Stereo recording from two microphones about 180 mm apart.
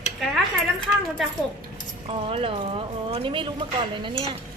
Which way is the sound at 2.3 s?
30° right (ahead or behind).